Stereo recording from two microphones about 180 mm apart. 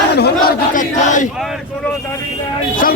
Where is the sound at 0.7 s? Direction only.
45° left (ahead or behind).